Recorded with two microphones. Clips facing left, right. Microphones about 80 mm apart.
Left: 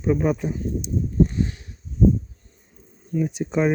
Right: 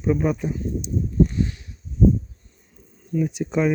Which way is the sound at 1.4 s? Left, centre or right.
Left.